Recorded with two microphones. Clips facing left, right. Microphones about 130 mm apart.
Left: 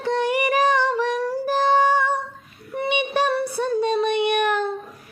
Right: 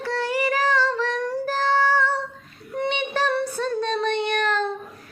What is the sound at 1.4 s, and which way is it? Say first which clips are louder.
Music: left 4 dB; 15° left (ahead or behind).